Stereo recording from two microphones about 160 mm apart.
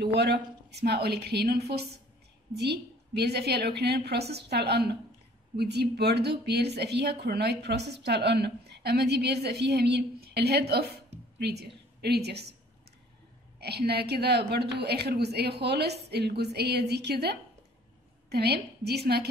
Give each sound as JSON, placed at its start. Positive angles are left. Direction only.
{"t": 0.0, "sound": "a woman's voice", "side_deg": -90}
{"t": 13.6, "sound": "a woman's voice", "side_deg": -90}